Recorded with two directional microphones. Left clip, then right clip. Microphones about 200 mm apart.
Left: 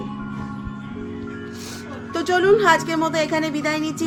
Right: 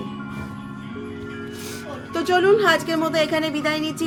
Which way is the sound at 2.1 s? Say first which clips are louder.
Even; 10° left (ahead or behind).